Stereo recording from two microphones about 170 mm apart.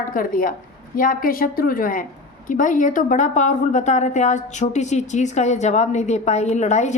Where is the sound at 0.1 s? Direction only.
55° left (ahead or behind).